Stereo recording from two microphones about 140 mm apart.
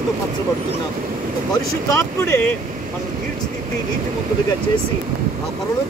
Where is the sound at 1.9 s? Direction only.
15° left (ahead or behind).